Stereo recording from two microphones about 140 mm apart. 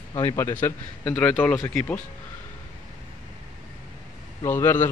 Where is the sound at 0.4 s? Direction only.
15° left (ahead or behind).